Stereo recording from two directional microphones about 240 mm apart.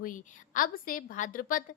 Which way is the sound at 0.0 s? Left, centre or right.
Left.